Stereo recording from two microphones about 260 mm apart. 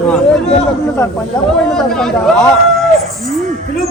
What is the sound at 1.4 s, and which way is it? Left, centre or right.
A man's voice, centre.